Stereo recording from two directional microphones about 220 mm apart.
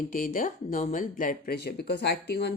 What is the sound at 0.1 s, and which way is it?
Speech, 40° left (ahead or behind).